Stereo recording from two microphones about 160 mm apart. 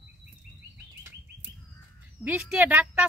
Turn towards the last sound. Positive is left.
turn(degrees=-10)  # may be behind; listen again after turning